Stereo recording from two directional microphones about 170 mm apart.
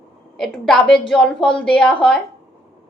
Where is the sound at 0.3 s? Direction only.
Centre (ahead or behind).